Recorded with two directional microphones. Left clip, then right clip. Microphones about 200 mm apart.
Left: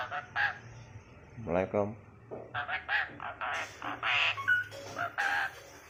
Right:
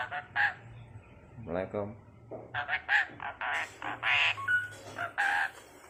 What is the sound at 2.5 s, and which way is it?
Frog, 10° right (ahead or behind).